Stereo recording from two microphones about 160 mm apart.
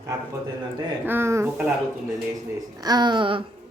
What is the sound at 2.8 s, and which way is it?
Speech, 25° right (ahead or behind).